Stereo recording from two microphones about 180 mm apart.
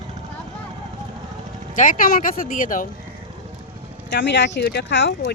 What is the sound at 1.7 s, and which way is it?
Speech, 45° left (ahead or behind).